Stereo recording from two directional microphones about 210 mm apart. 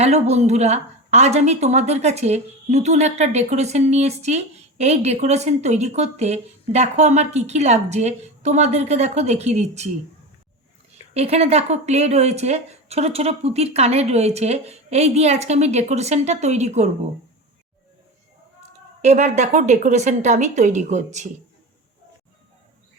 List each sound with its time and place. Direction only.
0.0 s a woman's voice: 30° right (ahead or behind)
11.1 s a woman's voice: 30° right (ahead or behind)
19.0 s a woman's voice: 35° right (ahead or behind)